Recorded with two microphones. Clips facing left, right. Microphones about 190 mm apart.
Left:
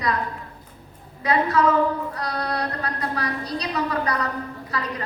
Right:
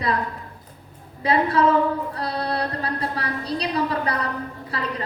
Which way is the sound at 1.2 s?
30° right (ahead or behind).